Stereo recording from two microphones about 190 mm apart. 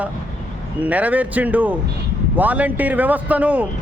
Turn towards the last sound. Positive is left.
turn(degrees=-5)  # may be behind; listen again after turning